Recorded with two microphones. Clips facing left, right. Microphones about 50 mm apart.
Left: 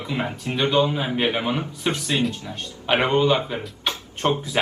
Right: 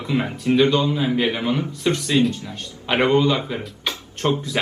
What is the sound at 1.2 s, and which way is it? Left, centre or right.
Speech, left.